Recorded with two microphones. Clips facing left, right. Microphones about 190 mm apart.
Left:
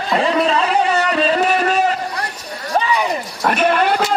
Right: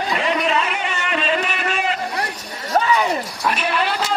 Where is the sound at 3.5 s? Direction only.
50° left (ahead or behind).